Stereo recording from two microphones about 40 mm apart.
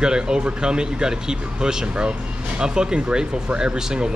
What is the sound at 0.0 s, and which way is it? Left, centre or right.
Speech, centre.